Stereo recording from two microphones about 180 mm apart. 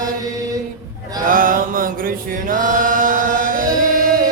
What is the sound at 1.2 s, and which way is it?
Chant, 50° right (ahead or behind).